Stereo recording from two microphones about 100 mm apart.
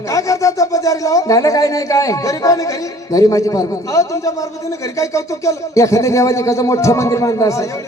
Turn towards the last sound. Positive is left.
turn(degrees=30)  # may be behind; listen again after turning